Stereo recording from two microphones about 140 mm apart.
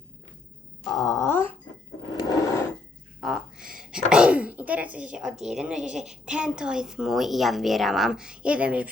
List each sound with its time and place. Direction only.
1.0 s speech: 20° left (ahead or behind)
2.1 s filing: 25° left (ahead or behind)
3.2 s speech: 5° right (ahead or behind)